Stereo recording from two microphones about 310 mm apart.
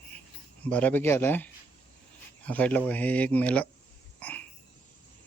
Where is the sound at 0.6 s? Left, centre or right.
Centre.